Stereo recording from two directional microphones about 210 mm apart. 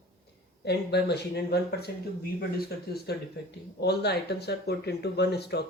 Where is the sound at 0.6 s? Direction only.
50° left (ahead or behind).